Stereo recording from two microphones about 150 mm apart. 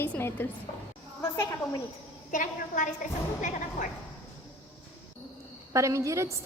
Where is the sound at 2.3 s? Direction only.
60° left (ahead or behind).